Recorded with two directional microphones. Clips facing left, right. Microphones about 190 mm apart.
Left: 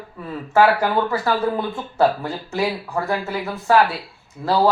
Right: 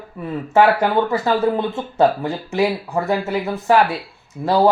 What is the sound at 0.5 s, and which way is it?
Speech, 20° right (ahead or behind).